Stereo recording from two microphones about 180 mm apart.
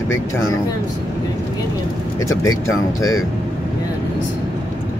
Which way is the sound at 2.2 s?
15° left (ahead or behind).